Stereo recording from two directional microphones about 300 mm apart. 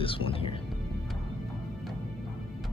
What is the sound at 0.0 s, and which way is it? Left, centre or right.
Speech, centre.